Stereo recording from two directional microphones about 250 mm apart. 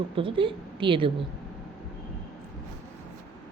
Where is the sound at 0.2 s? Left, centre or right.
Right.